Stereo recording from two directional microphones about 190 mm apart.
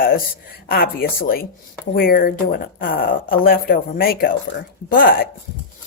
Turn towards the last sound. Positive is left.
turn(degrees=50)  # may be behind; listen again after turning